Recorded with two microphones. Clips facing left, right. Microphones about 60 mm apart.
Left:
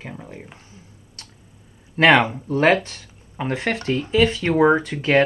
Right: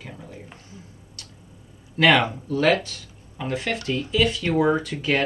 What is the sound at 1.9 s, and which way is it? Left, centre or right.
Speech, left.